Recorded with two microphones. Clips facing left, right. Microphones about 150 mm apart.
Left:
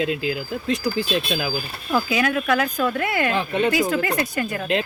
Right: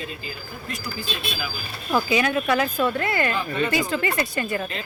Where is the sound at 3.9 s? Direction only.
Centre (ahead or behind).